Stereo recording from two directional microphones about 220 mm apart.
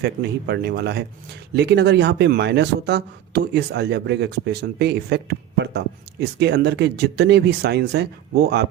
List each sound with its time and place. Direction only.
0.0 s speech: 50° right (ahead or behind)